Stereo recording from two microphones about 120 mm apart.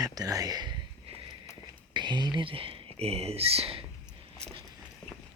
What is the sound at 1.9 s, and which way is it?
Speech, 40° right (ahead or behind).